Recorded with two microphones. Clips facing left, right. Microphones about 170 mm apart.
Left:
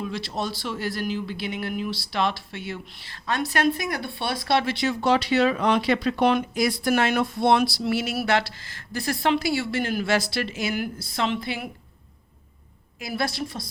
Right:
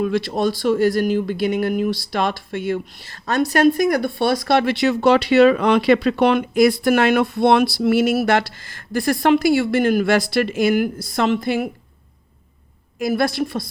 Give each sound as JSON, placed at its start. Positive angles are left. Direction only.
{"t": 0.0, "sound": "speech", "side_deg": -55}
{"t": 13.0, "sound": "speech", "side_deg": -50}